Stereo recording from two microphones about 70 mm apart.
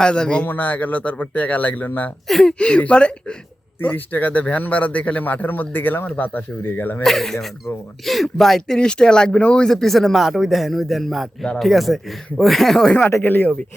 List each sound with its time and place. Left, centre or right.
0.0 s speech: centre
0.4 s a man's voice: left
2.2 s speech: centre
3.8 s a man's voice: left
7.0 s speech: centre
13.1 s a man's voice: left